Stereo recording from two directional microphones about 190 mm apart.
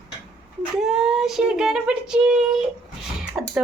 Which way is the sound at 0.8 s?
Centre (ahead or behind).